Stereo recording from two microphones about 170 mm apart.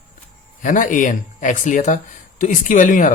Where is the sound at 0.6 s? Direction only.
50° left (ahead or behind).